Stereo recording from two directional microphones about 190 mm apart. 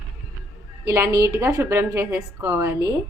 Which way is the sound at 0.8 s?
15° right (ahead or behind).